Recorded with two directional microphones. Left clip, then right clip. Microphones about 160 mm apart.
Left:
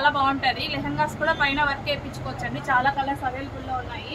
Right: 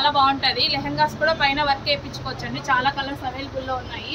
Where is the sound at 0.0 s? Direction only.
15° left (ahead or behind).